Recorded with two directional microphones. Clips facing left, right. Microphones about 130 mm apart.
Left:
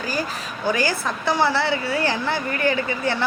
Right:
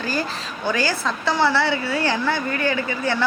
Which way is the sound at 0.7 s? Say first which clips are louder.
Even; 15° left (ahead or behind).